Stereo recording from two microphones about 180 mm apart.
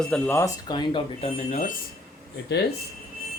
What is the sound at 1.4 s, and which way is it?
Speech, 45° left (ahead or behind).